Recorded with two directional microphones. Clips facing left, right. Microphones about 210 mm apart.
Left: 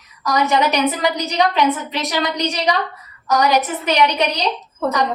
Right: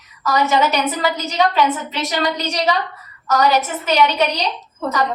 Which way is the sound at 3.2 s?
15° left (ahead or behind).